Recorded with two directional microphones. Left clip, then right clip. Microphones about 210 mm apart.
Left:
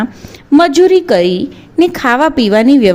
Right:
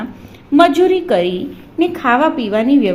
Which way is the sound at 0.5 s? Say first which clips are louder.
Left 3 dB; 55° left (ahead or behind).